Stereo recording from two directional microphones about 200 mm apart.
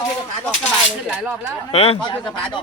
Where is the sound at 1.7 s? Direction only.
30° left (ahead or behind).